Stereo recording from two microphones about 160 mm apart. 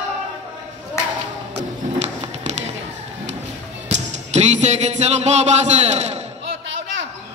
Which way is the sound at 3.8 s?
45° right (ahead or behind).